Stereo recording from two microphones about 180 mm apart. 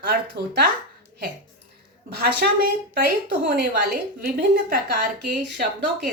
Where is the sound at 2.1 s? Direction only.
55° right (ahead or behind).